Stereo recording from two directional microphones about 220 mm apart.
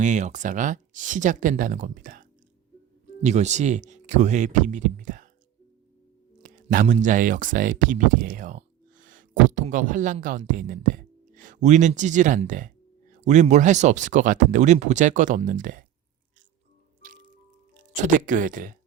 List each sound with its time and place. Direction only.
0.0 s speech: 35° right (ahead or behind)
3.2 s speech: 30° right (ahead or behind)
6.4 s speech: 35° right (ahead or behind)
17.0 s music: 35° right (ahead or behind)
17.7 s speech: 35° right (ahead or behind)